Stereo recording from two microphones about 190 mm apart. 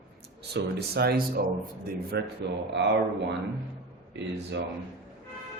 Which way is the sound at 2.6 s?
65° right (ahead or behind).